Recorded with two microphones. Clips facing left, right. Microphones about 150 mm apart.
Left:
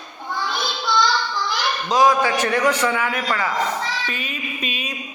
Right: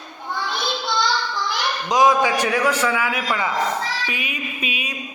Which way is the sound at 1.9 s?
20° right (ahead or behind).